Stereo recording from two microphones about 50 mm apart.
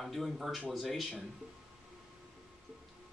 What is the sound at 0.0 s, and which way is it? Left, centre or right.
Speech, centre.